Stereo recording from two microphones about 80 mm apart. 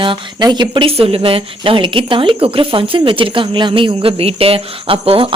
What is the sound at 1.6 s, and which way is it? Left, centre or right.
Speech, right.